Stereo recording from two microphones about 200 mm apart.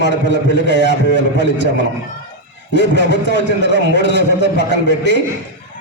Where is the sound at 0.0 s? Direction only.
60° left (ahead or behind).